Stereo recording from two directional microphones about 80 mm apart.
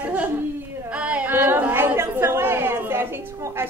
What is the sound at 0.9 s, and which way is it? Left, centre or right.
Chatter, centre.